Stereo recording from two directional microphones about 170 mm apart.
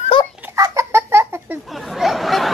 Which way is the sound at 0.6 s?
15° right (ahead or behind).